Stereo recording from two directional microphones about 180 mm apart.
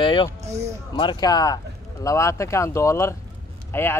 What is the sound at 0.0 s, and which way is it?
Speech, 25° left (ahead or behind).